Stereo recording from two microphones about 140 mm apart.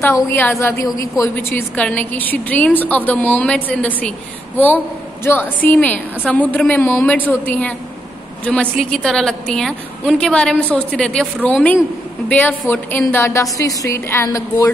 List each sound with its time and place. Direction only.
0.3 s a woman's voice: 15° left (ahead or behind)
8.7 s a woman's voice: centre (ahead or behind); by 14.7 s 20° left (ahead or behind)